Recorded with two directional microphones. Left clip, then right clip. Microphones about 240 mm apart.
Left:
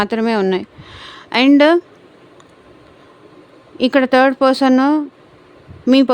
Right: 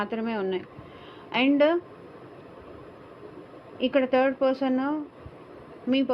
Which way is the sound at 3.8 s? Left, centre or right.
Left.